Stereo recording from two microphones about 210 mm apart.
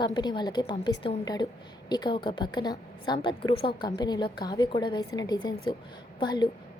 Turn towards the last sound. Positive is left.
turn(degrees=20)  # may be behind; listen again after turning